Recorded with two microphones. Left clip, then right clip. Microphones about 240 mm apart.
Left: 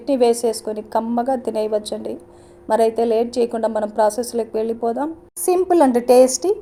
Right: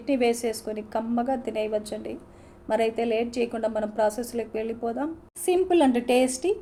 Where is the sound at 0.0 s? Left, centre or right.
Left.